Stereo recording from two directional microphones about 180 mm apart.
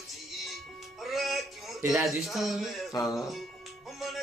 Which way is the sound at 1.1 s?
Centre (ahead or behind).